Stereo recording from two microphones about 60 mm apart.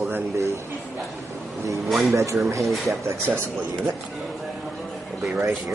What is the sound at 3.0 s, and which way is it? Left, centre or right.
Speech, right.